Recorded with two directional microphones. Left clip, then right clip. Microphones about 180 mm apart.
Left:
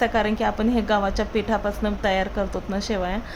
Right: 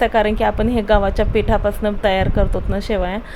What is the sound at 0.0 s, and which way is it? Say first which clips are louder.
A woman's voice: right 6 dB; 15° right (ahead or behind).